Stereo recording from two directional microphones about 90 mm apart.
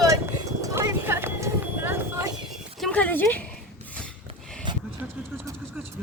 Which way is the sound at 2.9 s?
20° left (ahead or behind).